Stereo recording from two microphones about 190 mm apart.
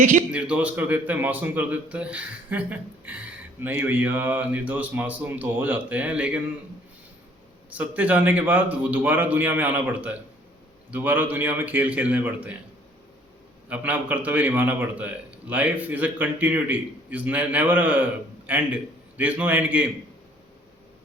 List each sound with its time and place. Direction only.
0.0 s a man's voice: 45° right (ahead or behind)
0.3 s a man's voice: 5° right (ahead or behind)
7.7 s a man's voice: 10° right (ahead or behind)
13.7 s a man's voice: 10° right (ahead or behind)